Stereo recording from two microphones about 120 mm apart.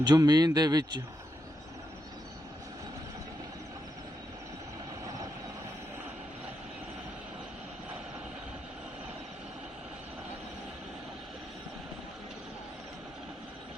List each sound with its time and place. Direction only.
0.0 s a man's voice: 35° right (ahead or behind)